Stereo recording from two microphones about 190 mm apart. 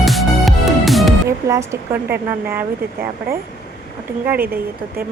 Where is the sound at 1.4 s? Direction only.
15° right (ahead or behind).